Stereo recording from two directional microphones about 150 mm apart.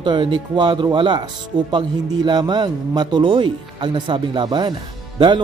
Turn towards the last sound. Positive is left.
turn(degrees=-30)  # may be behind; listen again after turning